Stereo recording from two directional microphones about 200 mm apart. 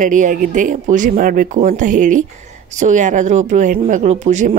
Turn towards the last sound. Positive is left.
turn(degrees=-35)  # may be behind; listen again after turning